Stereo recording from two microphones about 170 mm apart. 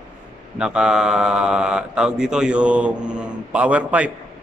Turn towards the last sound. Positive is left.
turn(degrees=-5)  # may be behind; listen again after turning